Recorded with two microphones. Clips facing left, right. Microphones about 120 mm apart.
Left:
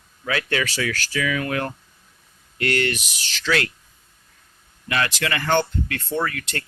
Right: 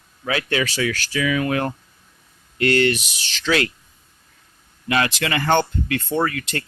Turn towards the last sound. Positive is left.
turn(degrees=-20)  # may be behind; listen again after turning